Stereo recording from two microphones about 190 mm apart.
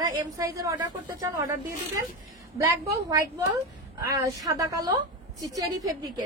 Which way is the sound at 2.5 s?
15° right (ahead or behind).